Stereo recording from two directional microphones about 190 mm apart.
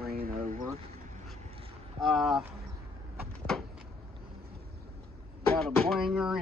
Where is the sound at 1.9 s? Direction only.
Centre (ahead or behind).